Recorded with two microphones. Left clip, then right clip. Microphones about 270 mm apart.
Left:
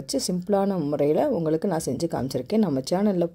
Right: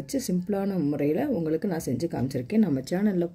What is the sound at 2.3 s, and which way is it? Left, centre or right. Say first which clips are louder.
Speech: left 2 dB; left.